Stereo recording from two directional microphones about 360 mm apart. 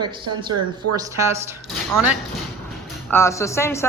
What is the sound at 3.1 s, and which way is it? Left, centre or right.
Speech, centre.